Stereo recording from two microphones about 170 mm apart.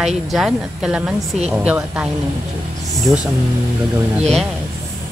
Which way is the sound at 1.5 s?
5° right (ahead or behind).